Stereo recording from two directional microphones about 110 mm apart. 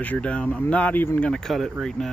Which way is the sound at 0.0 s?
10° left (ahead or behind).